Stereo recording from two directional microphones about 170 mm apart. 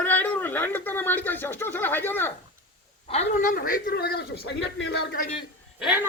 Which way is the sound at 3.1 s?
45° left (ahead or behind).